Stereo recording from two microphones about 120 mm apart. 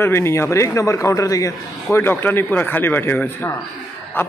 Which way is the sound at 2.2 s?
15° left (ahead or behind).